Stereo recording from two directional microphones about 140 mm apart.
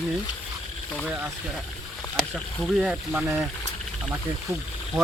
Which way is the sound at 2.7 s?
5° right (ahead or behind).